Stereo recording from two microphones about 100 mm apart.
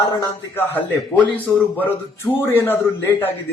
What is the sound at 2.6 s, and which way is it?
Speech, 20° left (ahead or behind).